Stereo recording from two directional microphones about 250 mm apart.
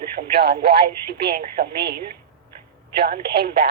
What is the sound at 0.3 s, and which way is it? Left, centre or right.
A woman's voice, right.